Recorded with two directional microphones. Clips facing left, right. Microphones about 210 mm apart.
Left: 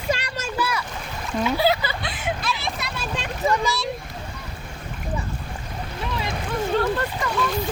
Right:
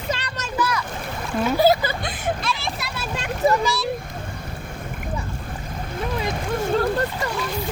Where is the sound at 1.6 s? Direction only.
45° right (ahead or behind).